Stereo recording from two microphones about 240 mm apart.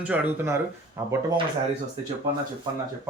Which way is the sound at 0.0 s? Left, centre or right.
Centre.